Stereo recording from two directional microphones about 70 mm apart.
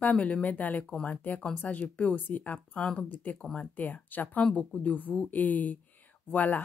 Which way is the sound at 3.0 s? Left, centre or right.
Left.